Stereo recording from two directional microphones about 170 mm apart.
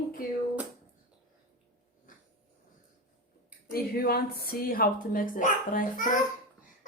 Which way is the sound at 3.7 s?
65° left (ahead or behind).